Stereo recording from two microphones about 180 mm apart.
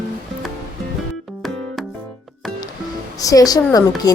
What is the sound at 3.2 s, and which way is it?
Speech, 20° left (ahead or behind).